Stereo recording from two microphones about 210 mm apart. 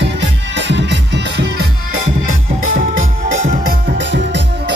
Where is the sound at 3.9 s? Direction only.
55° right (ahead or behind).